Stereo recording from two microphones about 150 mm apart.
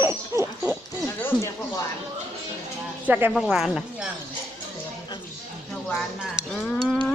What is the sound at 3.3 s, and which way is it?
Speech, 5° right (ahead or behind).